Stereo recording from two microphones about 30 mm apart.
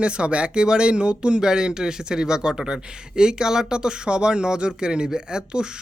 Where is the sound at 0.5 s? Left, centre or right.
Right.